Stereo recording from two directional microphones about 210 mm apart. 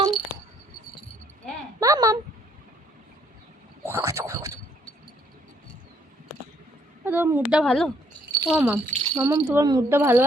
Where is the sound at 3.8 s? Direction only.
10° right (ahead or behind).